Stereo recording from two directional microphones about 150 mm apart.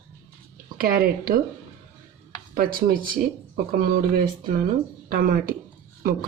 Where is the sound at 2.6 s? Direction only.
70° right (ahead or behind).